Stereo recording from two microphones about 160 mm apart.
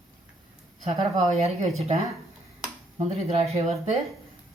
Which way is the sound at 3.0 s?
40° right (ahead or behind).